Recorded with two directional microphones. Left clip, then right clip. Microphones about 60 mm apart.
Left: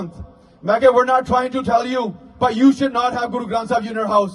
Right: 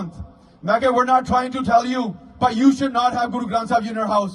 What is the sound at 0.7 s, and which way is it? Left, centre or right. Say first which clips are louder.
A man's voice: left 3 dB; left.